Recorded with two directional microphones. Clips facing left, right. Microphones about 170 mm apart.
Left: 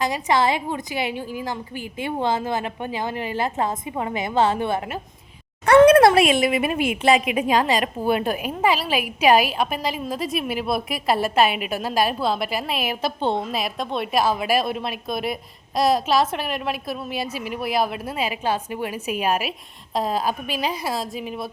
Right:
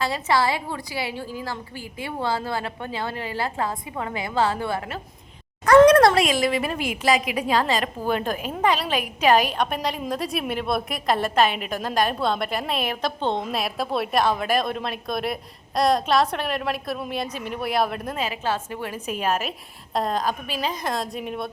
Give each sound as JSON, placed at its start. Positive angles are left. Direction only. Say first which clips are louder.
{"t": 0.0, "sound": "a woman's voice", "louder": "left 2 dB", "side_deg": 15}
{"t": 6.1, "sound": "a woman's voice", "louder": "left 3 dB", "side_deg": 25}